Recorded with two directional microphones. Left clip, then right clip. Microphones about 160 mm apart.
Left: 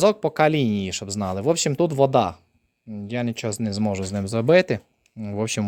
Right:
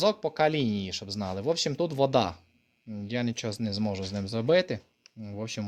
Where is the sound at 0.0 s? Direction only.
60° left (ahead or behind); by 1.5 s 45° left (ahead or behind).